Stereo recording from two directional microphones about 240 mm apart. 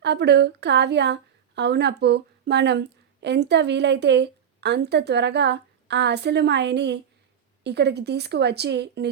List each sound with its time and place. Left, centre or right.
0.0 s a woman's voice: right